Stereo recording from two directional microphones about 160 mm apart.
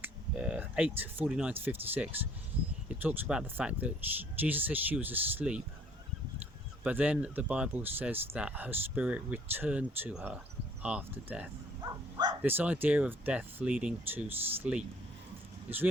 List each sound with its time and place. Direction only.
0.0 s speech: 10° right (ahead or behind)
6.8 s speech: 10° right (ahead or behind)
11.8 s livestock: 25° right (ahead or behind)
12.4 s speech: 10° right (ahead or behind)